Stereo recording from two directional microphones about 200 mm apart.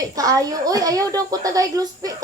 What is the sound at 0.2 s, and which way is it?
A woman's voice, 15° right (ahead or behind).